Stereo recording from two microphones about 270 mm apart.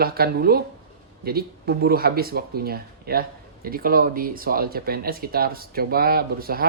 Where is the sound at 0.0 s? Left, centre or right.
Right.